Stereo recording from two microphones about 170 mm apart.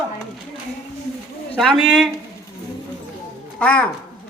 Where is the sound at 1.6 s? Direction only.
Centre (ahead or behind).